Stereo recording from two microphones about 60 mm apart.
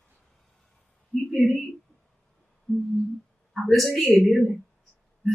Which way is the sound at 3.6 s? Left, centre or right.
Centre.